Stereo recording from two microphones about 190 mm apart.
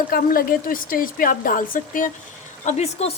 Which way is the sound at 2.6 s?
35° left (ahead or behind).